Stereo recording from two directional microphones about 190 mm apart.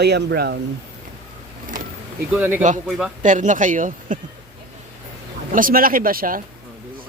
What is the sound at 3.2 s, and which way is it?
Speech, 40° right (ahead or behind).